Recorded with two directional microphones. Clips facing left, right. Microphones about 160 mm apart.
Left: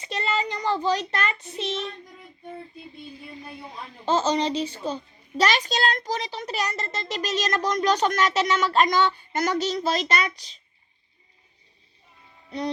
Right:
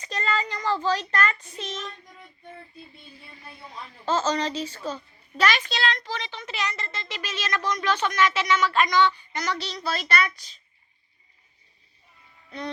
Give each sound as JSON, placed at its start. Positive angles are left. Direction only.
{"t": 0.0, "sound": "child singing", "side_deg": 25}
{"t": 1.4, "sound": "child singing", "side_deg": 30}
{"t": 4.0, "sound": "a child's voice", "side_deg": 30}
{"t": 10.3, "sound": "a child's voice", "side_deg": -45}
{"t": 12.5, "sound": "music", "side_deg": 35}